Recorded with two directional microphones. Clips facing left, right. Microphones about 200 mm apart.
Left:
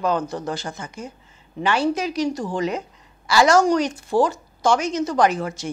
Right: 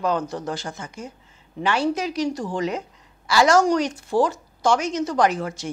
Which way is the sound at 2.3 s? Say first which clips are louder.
Left 1 dB; 20° left (ahead or behind).